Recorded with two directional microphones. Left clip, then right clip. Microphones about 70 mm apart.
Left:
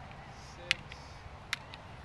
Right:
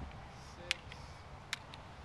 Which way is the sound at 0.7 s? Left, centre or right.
Left.